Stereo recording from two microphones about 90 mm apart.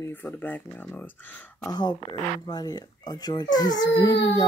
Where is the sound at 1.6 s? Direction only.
55° left (ahead or behind).